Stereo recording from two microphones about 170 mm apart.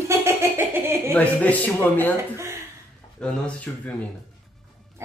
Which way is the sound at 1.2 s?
10° left (ahead or behind).